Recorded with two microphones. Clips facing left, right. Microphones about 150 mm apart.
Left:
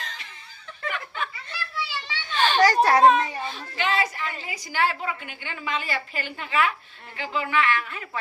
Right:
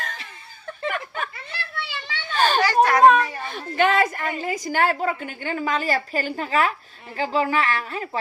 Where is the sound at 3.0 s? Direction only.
55° right (ahead or behind).